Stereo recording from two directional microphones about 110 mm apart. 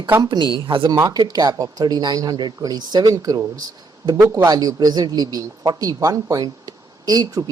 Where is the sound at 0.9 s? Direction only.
35° right (ahead or behind).